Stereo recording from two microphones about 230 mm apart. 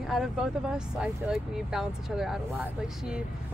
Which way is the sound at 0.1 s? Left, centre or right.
Centre.